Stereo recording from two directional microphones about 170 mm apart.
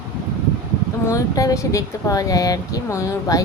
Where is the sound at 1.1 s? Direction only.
20° left (ahead or behind).